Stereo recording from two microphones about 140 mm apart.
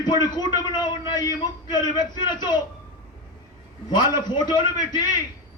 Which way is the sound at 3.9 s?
30° left (ahead or behind).